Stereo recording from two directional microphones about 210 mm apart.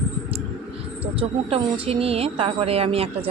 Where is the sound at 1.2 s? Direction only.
25° right (ahead or behind).